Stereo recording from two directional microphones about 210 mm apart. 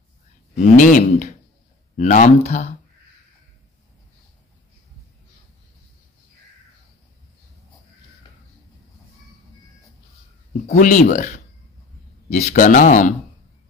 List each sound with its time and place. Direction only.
0.6 s speech: 40° left (ahead or behind)
10.7 s speech: 35° left (ahead or behind)